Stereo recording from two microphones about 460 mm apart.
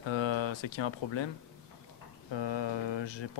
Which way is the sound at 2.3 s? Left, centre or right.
Left.